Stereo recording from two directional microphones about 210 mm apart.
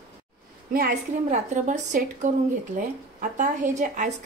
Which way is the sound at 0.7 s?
40° right (ahead or behind).